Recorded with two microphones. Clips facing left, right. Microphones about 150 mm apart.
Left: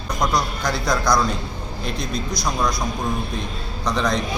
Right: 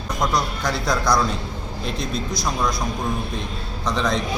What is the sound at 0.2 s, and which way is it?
A man's voice, 5° right (ahead or behind).